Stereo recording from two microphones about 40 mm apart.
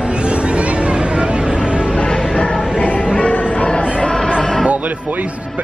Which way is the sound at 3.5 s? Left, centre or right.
Left.